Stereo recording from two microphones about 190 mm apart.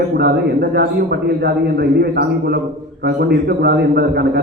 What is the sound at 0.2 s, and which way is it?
Mantra, 55° right (ahead or behind).